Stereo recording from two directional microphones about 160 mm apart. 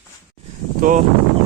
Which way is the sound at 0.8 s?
60° right (ahead or behind).